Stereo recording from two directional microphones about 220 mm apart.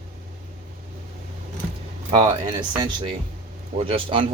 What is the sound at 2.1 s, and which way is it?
Speech, 20° right (ahead or behind).